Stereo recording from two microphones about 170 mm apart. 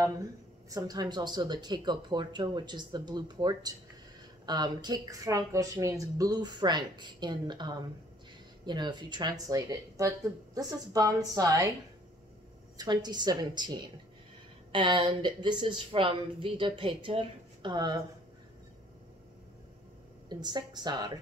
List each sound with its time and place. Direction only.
0.0 s speech: 20° right (ahead or behind)
12.7 s speech: 25° right (ahead or behind)
20.2 s speech: 25° right (ahead or behind)